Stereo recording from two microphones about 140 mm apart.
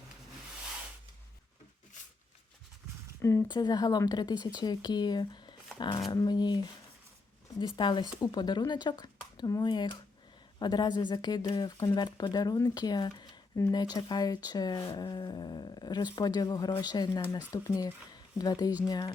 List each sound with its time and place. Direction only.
3.2 s speech: 20° left (ahead or behind)
7.8 s speech: 35° left (ahead or behind)